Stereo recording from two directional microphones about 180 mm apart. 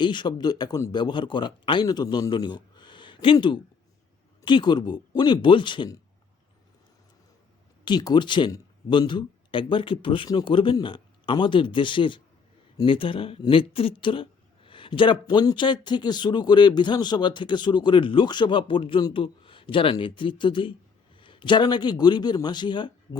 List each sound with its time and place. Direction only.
0.0 s speech: 25° left (ahead or behind)
7.9 s speech: 25° left (ahead or behind)